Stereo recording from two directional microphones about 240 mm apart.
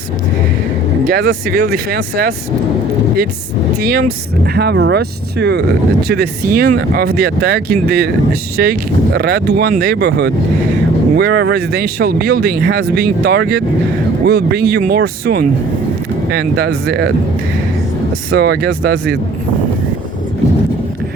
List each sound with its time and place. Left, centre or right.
1.0 s speech: right
3.8 s speech: right
18.3 s speech: right